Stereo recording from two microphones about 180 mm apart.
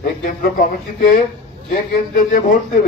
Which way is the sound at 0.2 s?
50° left (ahead or behind).